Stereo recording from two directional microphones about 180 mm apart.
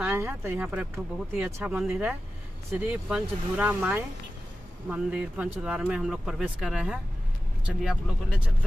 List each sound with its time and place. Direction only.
0.0 s speech: 10° right (ahead or behind)